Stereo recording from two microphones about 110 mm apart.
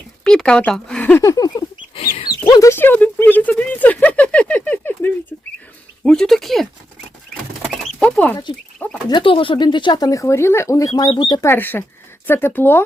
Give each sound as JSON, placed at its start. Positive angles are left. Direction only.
{"t": 0.3, "sound": "speech", "side_deg": 5}
{"t": 1.2, "sound": "speech", "side_deg": 30}
{"t": 2.0, "sound": "chicken", "side_deg": 60}
{"t": 2.5, "sound": "a sound", "side_deg": 30}
{"t": 2.7, "sound": "a sound", "side_deg": 15}
{"t": 6.1, "sound": "a sound", "side_deg": 5}
{"t": 8.0, "sound": "chicken", "side_deg": 15}
{"t": 9.0, "sound": "speech", "side_deg": 50}
{"t": 11.1, "sound": "speech", "side_deg": 50}
{"t": 11.3, "sound": "speech", "side_deg": 20}